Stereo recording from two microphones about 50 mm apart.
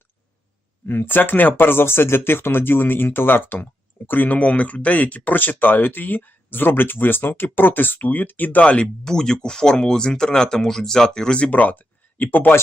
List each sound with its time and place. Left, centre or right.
0.9 s speech: left
4.4 s speech: left
9.0 s speech: centre
11.5 s speech: left